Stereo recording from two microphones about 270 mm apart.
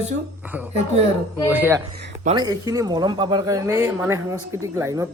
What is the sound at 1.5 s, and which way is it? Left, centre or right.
Speech, centre.